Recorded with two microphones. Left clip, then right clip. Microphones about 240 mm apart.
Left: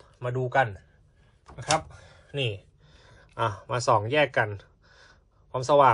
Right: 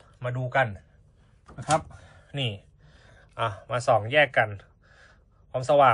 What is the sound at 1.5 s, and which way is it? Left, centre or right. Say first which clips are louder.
Speech: right 1 dB; left.